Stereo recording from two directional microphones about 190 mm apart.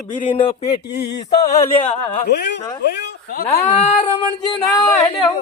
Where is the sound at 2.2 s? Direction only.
60° left (ahead or behind).